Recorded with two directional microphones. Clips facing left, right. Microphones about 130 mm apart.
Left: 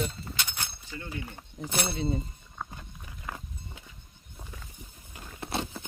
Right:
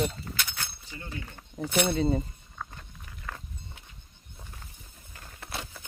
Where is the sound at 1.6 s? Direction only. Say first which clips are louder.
Right 5 dB; 35° left (ahead or behind).